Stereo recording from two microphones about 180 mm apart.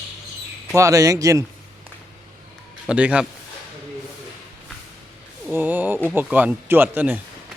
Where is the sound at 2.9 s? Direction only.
5° right (ahead or behind).